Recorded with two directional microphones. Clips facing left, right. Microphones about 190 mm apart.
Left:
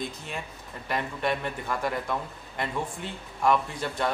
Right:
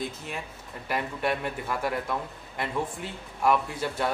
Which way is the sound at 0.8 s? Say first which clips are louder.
Even; 10° right (ahead or behind).